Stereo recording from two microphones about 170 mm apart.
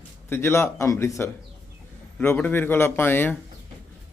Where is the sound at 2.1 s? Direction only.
10° left (ahead or behind).